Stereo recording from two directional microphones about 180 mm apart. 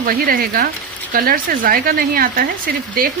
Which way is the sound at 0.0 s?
55° right (ahead or behind).